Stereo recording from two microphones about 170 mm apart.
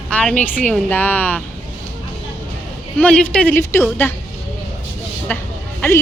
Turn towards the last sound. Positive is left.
turn(degrees=15)  # may be behind; listen again after turning